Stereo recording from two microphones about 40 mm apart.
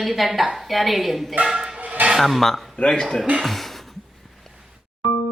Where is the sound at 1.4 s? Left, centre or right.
Centre.